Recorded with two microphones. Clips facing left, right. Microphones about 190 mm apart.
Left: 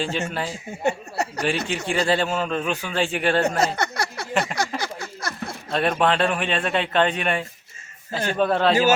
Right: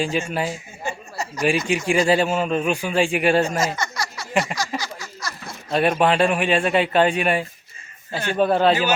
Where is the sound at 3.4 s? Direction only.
65° left (ahead or behind).